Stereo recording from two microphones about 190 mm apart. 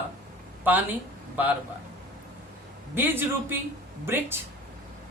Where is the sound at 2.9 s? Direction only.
10° right (ahead or behind).